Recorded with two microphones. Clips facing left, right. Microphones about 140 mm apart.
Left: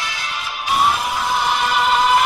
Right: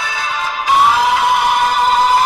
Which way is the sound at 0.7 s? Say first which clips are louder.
Right 6 dB; 90° right.